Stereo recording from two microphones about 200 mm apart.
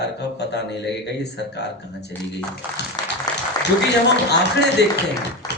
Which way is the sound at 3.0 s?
20° left (ahead or behind).